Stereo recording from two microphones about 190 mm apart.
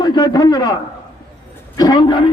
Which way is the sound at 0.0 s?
20° left (ahead or behind).